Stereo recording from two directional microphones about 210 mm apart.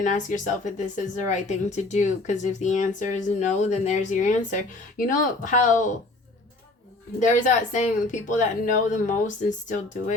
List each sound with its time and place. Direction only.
0.0 s speech: 35° left (ahead or behind)
7.2 s speech: 35° left (ahead or behind)